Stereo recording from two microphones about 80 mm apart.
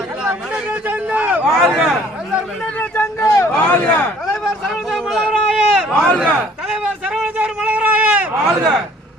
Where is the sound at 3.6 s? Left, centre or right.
Left.